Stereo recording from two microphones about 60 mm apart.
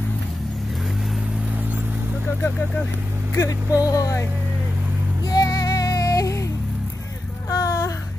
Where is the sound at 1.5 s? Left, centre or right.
Right.